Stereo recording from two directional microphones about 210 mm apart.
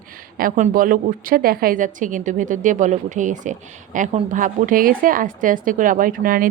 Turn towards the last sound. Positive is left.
turn(degrees=-40)  # may be behind; listen again after turning